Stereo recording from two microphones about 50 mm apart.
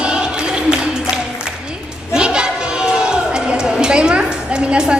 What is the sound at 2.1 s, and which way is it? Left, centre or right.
Chatter, centre.